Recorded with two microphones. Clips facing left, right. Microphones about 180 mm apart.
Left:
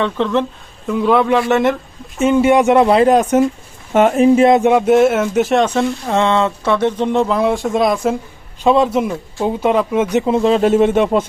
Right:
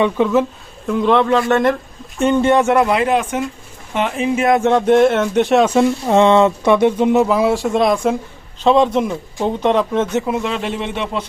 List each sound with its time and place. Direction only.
0.0 s speech: 5° right (ahead or behind)
0.9 s speech: 5° left (ahead or behind)
2.8 s speech: 35° left (ahead or behind)
4.4 s a sound: 20° left (ahead or behind)
4.7 s speech: 5° left (ahead or behind)
10.2 s speech: 35° left (ahead or behind)